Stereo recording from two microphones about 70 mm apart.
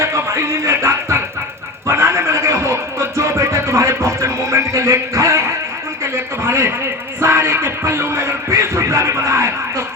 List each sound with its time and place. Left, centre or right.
0.0 s music: right
6.0 s a sound: right
7.2 s music: right